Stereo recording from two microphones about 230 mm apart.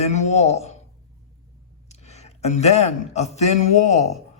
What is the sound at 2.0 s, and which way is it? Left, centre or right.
A man's voice, left.